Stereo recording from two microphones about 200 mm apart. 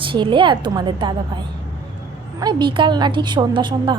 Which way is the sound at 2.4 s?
20° right (ahead or behind).